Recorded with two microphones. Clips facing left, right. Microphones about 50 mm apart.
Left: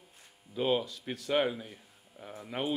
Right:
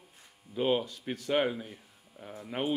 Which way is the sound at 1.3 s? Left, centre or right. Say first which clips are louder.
Even; centre.